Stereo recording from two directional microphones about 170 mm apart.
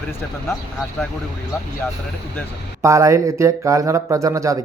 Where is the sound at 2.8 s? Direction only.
20° right (ahead or behind).